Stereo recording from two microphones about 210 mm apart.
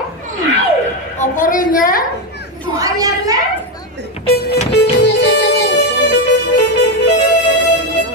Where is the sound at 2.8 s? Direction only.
15° right (ahead or behind).